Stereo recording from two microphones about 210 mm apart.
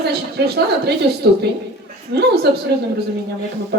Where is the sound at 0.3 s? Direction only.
50° right (ahead or behind).